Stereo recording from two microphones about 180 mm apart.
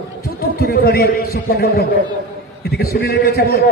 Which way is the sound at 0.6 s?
55° left (ahead or behind).